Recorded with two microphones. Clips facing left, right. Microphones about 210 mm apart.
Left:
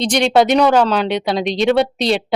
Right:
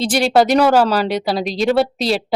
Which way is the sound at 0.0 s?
5° right (ahead or behind).